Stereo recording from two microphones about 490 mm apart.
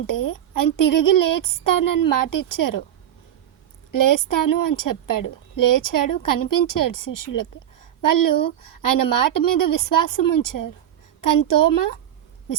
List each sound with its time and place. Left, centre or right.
0.1 s a woman's voice: left
3.9 s a woman's voice: left